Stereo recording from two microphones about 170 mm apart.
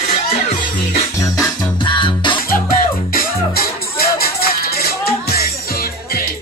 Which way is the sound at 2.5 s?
60° left (ahead or behind).